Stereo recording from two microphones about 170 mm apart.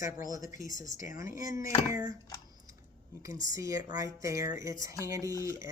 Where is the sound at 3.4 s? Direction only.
20° right (ahead or behind).